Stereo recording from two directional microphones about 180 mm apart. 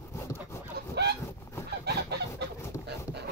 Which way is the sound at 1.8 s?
65° right (ahead or behind).